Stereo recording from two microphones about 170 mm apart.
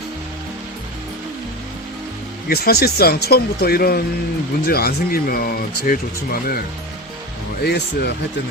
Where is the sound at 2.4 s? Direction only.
65° left (ahead or behind).